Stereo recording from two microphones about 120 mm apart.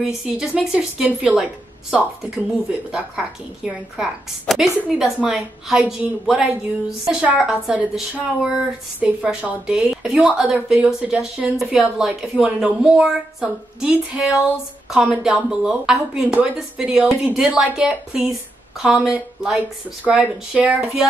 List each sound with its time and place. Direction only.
0.0 s a woman's voice: 5° right (ahead or behind)